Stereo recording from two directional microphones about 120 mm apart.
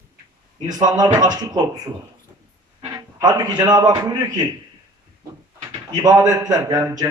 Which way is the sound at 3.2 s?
30° right (ahead or behind).